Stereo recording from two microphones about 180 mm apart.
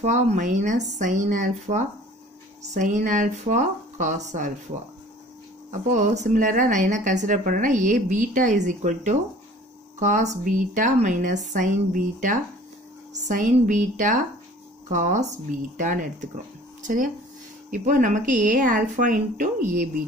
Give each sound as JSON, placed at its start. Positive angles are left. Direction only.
{"t": 0.0, "sound": "speech", "side_deg": -40}
{"t": 5.7, "sound": "speech", "side_deg": -40}